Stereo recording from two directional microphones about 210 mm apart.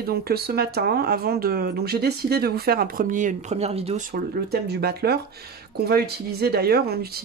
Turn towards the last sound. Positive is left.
turn(degrees=-50)  # may be behind; listen again after turning